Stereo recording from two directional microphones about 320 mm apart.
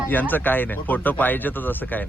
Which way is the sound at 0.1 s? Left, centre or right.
Centre.